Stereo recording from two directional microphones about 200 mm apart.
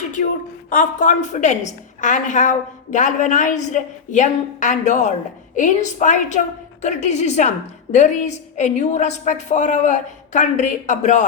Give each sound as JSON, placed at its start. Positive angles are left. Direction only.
{"t": 0.7, "sound": "a woman's voice", "side_deg": 40}